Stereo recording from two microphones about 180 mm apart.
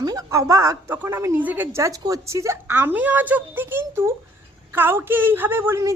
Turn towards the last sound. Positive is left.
turn(degrees=-15)  # may be behind; listen again after turning